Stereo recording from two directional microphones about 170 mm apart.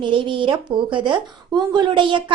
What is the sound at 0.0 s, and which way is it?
A woman's voice, 30° right (ahead or behind).